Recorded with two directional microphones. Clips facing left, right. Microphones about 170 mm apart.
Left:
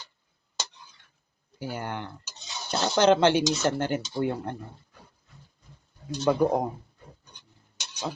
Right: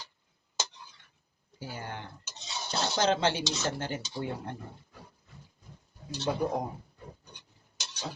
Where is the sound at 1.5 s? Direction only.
65° left (ahead or behind).